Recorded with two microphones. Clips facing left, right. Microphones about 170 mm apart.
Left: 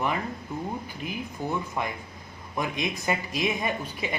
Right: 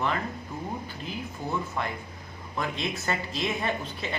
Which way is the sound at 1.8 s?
15° left (ahead or behind).